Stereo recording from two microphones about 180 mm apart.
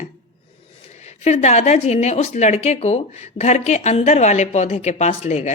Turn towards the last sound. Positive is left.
turn(degrees=40)  # may be behind; listen again after turning